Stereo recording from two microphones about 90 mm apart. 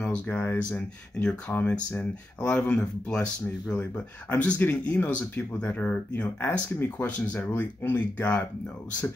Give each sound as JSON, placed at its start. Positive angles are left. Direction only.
{"t": 0.3, "sound": "speech", "side_deg": 25}